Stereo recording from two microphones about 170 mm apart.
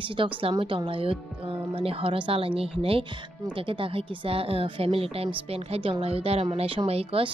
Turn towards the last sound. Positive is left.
turn(degrees=-35)  # may be behind; listen again after turning